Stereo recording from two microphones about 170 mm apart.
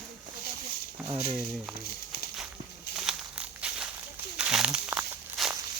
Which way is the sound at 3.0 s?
5° right (ahead or behind).